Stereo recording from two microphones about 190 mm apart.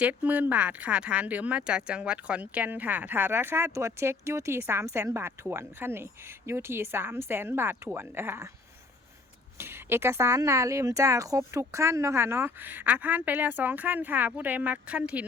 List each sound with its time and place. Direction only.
0.0 s speech: 10° right (ahead or behind)
9.6 s speech: 10° right (ahead or behind)